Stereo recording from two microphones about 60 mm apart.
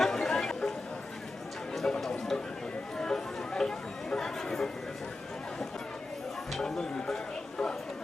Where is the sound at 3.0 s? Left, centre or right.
Centre.